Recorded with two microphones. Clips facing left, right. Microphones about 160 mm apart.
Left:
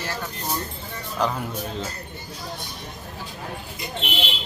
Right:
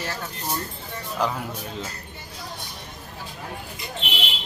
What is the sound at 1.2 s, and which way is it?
Speech, 5° right (ahead or behind).